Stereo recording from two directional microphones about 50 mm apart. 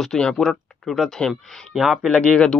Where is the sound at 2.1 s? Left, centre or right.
Centre.